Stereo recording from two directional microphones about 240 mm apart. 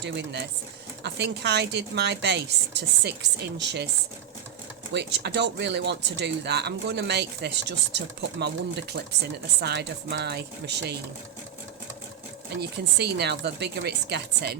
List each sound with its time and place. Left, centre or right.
0.0 s speech: right
4.9 s speech: right
12.5 s speech: right